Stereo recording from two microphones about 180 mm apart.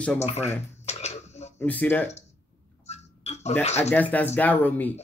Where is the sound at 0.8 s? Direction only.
40° left (ahead or behind).